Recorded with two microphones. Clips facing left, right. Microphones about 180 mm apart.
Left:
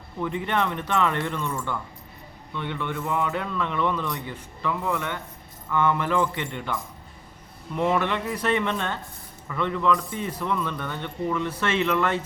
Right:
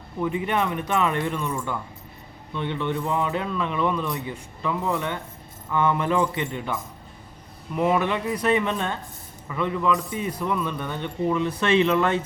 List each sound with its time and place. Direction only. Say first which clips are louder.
0.2 s speech: right 2 dB; 15° right (ahead or behind)
7.8 s speech: right 2 dB; 10° right (ahead or behind)